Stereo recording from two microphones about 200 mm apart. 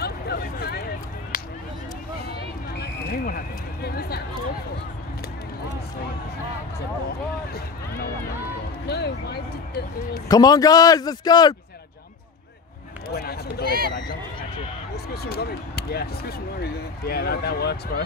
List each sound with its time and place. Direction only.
0.0 s a sound: 50° left (ahead or behind)
7.5 s speech: 50° left (ahead or behind)
10.2 s a man's voice: 20° left (ahead or behind)
13.1 s speech: 50° left (ahead or behind)
15.2 s speech: 50° left (ahead or behind)